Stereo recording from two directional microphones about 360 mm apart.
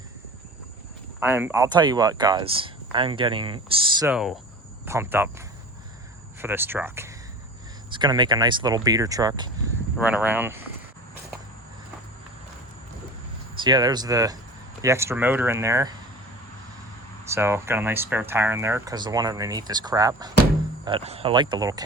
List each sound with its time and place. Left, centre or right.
1.2 s speech: centre
6.4 s speech: centre
13.6 s speech: centre
17.2 s speech: centre